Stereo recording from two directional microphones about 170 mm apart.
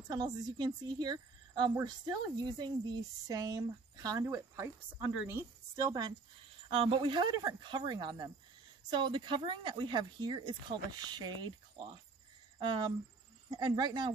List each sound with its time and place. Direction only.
0.1 s speech: 25° right (ahead or behind)